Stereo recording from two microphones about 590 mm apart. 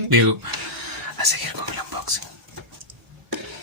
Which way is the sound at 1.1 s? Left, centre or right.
Right.